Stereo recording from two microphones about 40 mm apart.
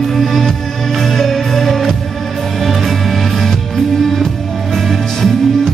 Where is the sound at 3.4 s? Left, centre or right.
Centre.